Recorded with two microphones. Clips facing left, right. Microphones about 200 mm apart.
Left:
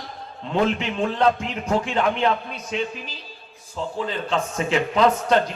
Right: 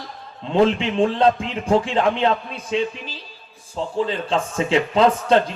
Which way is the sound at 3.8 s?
30° right (ahead or behind).